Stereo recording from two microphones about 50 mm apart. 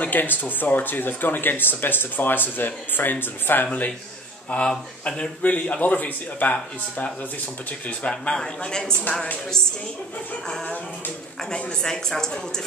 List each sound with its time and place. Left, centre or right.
0.0 s speech: left
4.5 s speech: left
5.4 s speech: left
8.0 s speech: centre
11.5 s speech: centre